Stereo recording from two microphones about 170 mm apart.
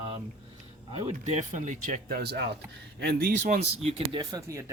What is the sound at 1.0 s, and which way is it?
Speech, 40° right (ahead or behind).